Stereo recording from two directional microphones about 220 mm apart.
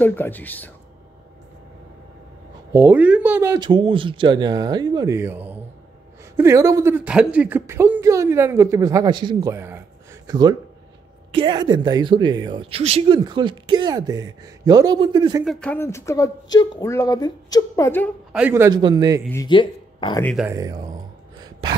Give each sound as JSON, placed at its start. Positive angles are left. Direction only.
{"t": 0.0, "sound": "speech", "side_deg": 10}
{"t": 2.7, "sound": "a woman's voice", "side_deg": -10}
{"t": 15.4, "sound": "speech", "side_deg": 5}
{"t": 18.3, "sound": "a woman's voice", "side_deg": -10}
{"t": 19.2, "sound": "speech", "side_deg": 15}
{"t": 20.4, "sound": "a woman's voice", "side_deg": -15}
{"t": 21.4, "sound": "a sound", "side_deg": -20}